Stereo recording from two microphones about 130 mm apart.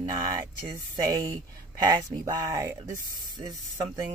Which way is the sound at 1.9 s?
30° right (ahead or behind).